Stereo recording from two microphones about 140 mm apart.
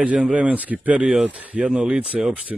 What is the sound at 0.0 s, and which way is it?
Speech, 10° right (ahead or behind).